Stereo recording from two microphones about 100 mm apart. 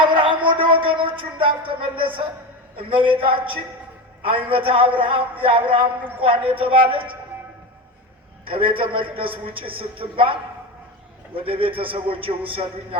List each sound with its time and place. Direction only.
0.0 s music: 50° right (ahead or behind)
2.7 s a man's voice: 55° right (ahead or behind)
8.4 s a man's voice: 60° right (ahead or behind)